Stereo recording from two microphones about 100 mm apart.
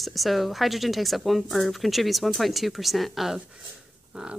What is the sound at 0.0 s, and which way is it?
A woman's voice, centre (ahead or behind).